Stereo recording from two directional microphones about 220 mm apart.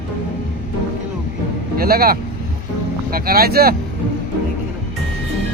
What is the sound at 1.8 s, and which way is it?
Speech, 45° right (ahead or behind).